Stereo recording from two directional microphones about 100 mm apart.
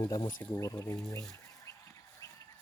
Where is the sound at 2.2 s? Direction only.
35° left (ahead or behind).